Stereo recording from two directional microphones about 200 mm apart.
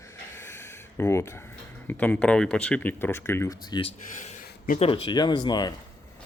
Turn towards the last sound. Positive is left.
turn(degrees=20)  # may be behind; listen again after turning